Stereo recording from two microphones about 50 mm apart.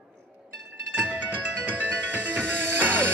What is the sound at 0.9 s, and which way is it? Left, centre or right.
Music, right.